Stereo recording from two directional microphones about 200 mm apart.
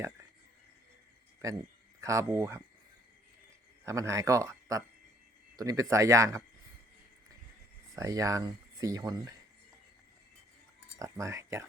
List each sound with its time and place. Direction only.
2.0 s speech: 15° right (ahead or behind)
3.8 s speech: 15° right (ahead or behind)
7.9 s speech: 15° right (ahead or behind)
11.0 s speech: 15° right (ahead or behind)